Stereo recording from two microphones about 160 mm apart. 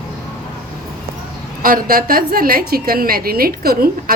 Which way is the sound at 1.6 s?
60° right (ahead or behind).